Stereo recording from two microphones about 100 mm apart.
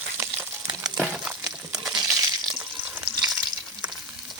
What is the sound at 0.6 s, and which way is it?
Crumpling, 35° right (ahead or behind).